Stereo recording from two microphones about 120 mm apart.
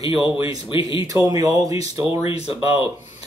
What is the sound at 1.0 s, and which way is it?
Speech, 30° right (ahead or behind).